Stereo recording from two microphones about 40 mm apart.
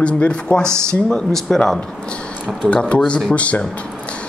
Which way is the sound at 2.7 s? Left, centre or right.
Left.